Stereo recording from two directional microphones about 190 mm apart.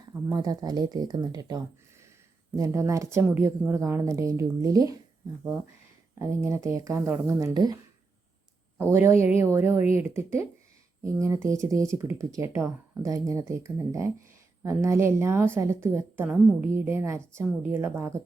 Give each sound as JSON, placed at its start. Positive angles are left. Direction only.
{"t": 0.0, "sound": "speech", "side_deg": -20}
{"t": 6.1, "sound": "speech", "side_deg": -15}
{"t": 8.8, "sound": "a woman's voice", "side_deg": -15}